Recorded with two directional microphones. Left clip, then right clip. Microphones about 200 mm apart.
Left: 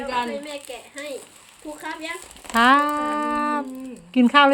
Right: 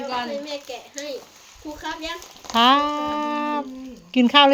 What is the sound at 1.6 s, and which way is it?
Speech, 25° left (ahead or behind).